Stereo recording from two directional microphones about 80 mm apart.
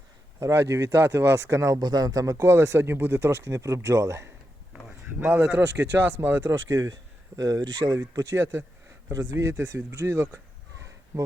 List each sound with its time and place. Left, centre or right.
0.3 s speech: right
1.8 s speech: right
5.2 s speech: right
6.5 s speech: right